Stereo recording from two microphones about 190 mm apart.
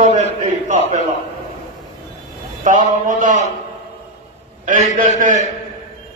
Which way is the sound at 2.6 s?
40° right (ahead or behind).